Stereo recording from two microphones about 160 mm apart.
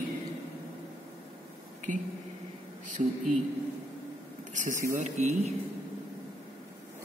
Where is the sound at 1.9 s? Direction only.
55° right (ahead or behind).